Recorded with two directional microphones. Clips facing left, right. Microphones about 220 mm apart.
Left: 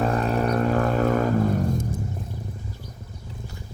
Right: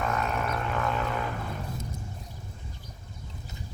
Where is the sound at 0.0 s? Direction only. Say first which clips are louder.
Left 7 dB; 35° left (ahead or behind).